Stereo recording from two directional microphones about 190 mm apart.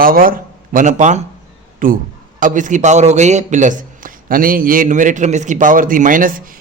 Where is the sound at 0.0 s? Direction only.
50° right (ahead or behind).